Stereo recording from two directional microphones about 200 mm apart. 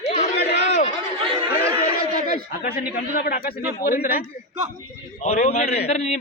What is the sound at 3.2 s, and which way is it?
A man's voice, 50° left (ahead or behind).